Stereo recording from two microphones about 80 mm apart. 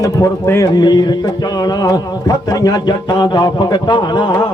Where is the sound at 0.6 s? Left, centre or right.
Left.